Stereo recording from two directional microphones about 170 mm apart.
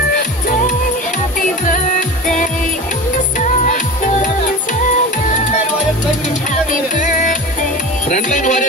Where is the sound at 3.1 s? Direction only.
45° left (ahead or behind).